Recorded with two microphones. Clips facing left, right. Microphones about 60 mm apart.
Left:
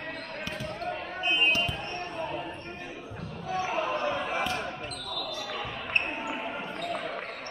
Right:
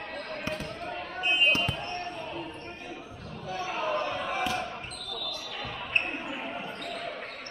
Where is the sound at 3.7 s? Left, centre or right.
Centre.